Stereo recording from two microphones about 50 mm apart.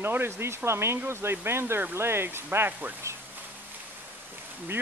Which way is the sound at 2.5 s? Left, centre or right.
Right.